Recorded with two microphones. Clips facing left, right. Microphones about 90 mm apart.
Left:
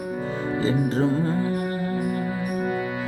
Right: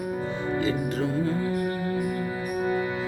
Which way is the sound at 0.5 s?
30° left (ahead or behind).